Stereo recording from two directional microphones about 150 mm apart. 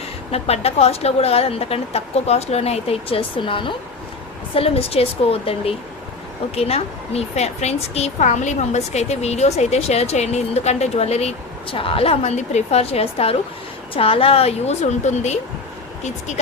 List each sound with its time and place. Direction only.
0.3 s a woman's voice: 45° left (ahead or behind)